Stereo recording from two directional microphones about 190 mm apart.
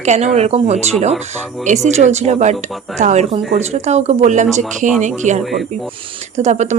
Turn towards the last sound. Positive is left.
turn(degrees=-40)  # may be behind; listen again after turning